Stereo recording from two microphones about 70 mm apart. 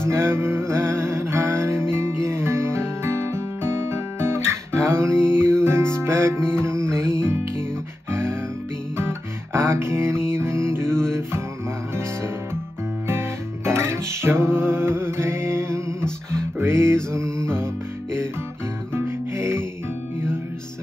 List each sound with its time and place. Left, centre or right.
0.0 s music: right
13.7 s music: right
16.0 s music: centre
16.5 s music: right
18.9 s music: right